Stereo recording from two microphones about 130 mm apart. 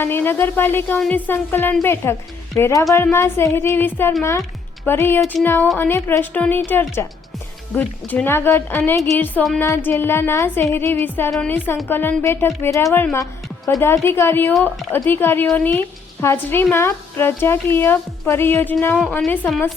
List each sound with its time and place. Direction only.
0.0 s a woman's voice: 15° left (ahead or behind)